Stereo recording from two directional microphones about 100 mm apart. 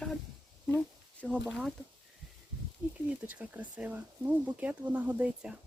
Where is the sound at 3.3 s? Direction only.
15° right (ahead or behind).